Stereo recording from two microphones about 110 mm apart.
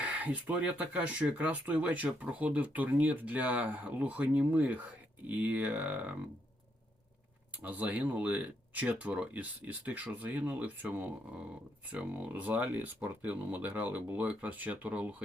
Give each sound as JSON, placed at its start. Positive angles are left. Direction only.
{"t": 0.0, "sound": "speech", "side_deg": -10}
{"t": 7.6, "sound": "speech", "side_deg": -15}